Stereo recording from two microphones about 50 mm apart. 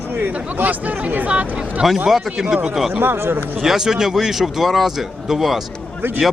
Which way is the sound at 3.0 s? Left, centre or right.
Right.